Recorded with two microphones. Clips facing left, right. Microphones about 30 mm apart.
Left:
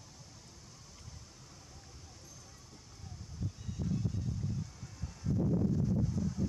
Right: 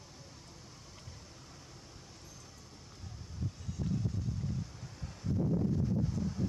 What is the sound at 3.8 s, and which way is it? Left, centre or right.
Music, right.